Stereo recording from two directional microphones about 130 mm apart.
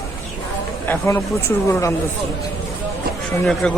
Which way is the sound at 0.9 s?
20° left (ahead or behind).